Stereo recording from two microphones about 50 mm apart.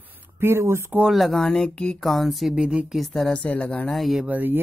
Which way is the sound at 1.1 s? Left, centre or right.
Centre.